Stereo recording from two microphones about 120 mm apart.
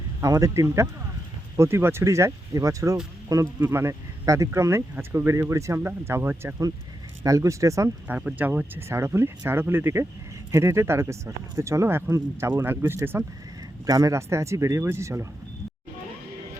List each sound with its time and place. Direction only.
0.2 s speech: 25° right (ahead or behind)
8.0 s speech: 15° right (ahead or behind)